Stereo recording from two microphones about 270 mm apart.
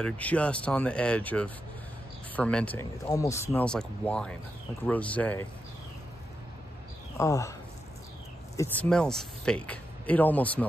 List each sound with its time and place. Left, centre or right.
0.0 s speech: centre
7.2 s speech: centre
8.5 s speech: centre